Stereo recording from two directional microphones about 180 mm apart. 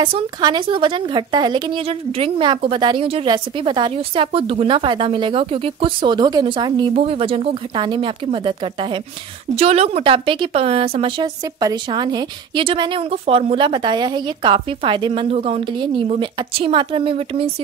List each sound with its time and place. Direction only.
0.0 s a woman's voice: 25° right (ahead or behind)